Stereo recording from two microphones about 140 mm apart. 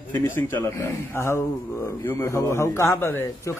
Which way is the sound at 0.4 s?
15° left (ahead or behind).